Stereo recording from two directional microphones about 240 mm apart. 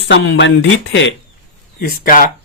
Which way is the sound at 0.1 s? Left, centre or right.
Left.